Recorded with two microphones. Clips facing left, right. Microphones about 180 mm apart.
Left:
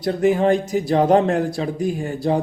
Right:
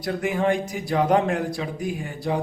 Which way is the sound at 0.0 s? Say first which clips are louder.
Left 6 dB; 30° left (ahead or behind).